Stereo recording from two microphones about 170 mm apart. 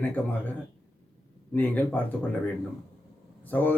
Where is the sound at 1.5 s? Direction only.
10° left (ahead or behind).